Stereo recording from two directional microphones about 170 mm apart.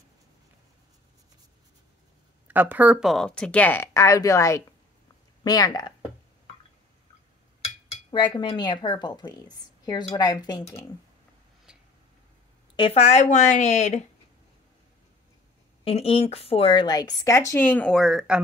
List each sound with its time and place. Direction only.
2.4 s speech: 10° right (ahead or behind); by 5.9 s 25° left (ahead or behind)
7.6 s speech: 30° left (ahead or behind)
12.7 s speech: 35° left (ahead or behind)
15.8 s speech: 35° left (ahead or behind); by 18.4 s 5° right (ahead or behind)